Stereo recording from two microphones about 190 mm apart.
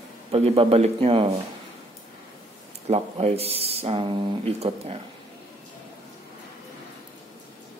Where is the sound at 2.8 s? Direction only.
35° right (ahead or behind).